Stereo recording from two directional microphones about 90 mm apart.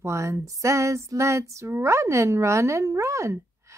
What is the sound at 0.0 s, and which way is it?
Speech, 35° right (ahead or behind).